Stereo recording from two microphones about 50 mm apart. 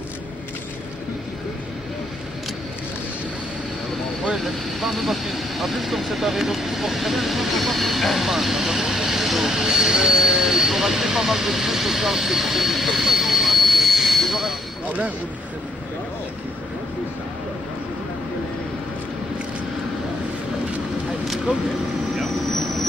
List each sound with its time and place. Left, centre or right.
4.4 s speech: centre
14.9 s a sound: right
22.6 s vehicle: centre